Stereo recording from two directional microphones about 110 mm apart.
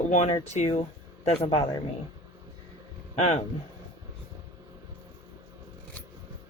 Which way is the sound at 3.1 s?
90° left.